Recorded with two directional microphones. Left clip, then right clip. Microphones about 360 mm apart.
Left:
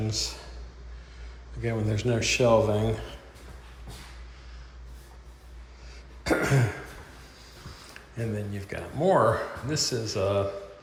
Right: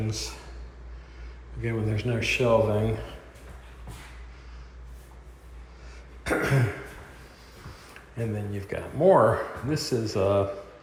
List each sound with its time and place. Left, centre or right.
0.1 s speech: centre
1.6 s a man's voice: centre
6.2 s throat clearing: centre
7.9 s speech: centre